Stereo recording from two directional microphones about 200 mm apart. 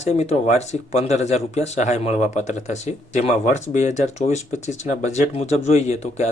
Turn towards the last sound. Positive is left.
turn(degrees=35)  # may be behind; listen again after turning